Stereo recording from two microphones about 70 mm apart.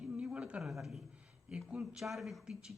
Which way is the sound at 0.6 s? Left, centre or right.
Centre.